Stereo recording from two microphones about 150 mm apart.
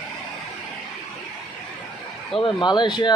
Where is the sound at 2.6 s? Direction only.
30° left (ahead or behind).